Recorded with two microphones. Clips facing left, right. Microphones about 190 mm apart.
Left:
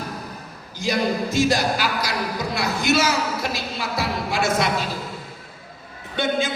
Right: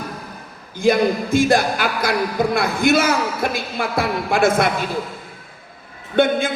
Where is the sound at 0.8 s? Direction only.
55° right (ahead or behind).